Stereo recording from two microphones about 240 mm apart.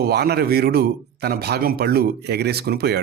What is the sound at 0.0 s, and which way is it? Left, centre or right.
Speech, right.